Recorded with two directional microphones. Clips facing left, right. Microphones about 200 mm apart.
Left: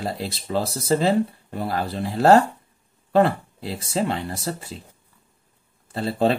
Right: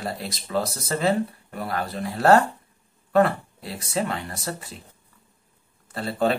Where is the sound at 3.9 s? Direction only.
30° left (ahead or behind).